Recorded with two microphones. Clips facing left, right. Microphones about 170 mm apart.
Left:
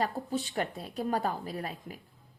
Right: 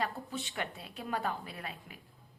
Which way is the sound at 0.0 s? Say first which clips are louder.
Left 5 dB; 35° left (ahead or behind).